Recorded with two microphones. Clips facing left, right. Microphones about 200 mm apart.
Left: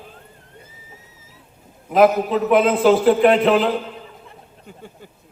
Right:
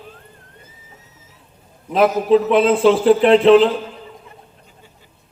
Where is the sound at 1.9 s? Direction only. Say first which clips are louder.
Right 1 dB; 30° right (ahead or behind).